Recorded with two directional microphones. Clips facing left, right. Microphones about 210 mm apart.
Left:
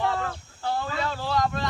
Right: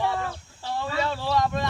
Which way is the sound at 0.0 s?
10° right (ahead or behind).